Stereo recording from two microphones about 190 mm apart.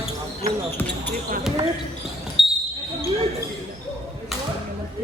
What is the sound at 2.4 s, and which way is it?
Basketball bounce, centre (ahead or behind).